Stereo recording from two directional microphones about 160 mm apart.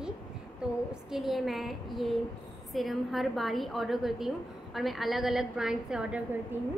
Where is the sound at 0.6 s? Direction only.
5° right (ahead or behind).